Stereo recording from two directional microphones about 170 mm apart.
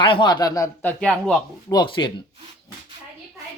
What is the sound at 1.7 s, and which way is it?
Speech, 25° left (ahead or behind).